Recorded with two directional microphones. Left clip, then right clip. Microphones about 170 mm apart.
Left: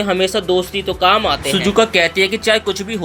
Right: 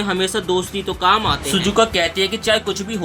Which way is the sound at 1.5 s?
15° left (ahead or behind).